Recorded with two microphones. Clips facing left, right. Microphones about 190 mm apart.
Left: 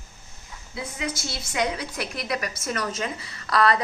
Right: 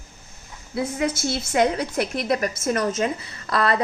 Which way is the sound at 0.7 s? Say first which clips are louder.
Right 8 dB; 55° right (ahead or behind).